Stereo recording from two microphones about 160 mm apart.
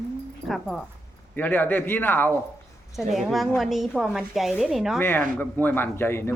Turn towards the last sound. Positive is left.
turn(degrees=15)  # may be behind; listen again after turning